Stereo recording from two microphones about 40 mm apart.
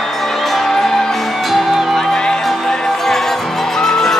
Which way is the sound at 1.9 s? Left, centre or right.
Centre.